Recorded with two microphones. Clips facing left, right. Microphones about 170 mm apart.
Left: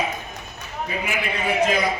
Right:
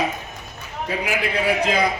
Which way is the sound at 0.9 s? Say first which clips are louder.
Right 4 dB; 90° right.